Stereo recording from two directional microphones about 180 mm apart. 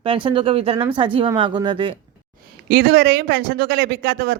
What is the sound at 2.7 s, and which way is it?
Speech, 60° right (ahead or behind).